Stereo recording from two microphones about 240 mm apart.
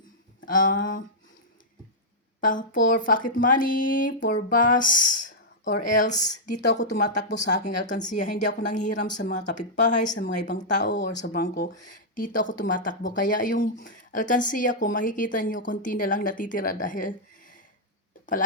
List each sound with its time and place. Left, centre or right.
0.4 s speech: left
2.4 s speech: left
6.9 s speech: left
7.6 s speech: left